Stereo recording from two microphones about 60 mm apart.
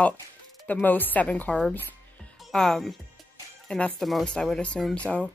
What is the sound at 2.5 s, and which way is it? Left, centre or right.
Speech, centre.